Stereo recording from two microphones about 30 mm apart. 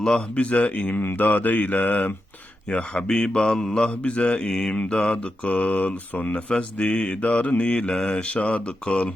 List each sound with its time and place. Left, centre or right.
0.0 s speech: centre
0.3 s mantra: left
1.1 s mantra: left
2.6 s speech: left
4.0 s mantra: left
4.4 s speech: left
5.1 s mantra: left
6.7 s mantra: left